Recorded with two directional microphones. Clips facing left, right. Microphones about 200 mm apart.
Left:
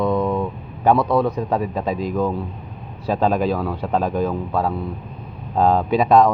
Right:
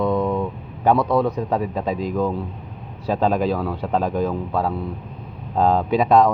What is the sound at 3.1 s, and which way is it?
Speech, 25° right (ahead or behind).